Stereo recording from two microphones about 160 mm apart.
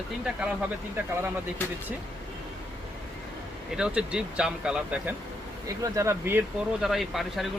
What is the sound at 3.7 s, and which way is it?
Speech, 5° right (ahead or behind).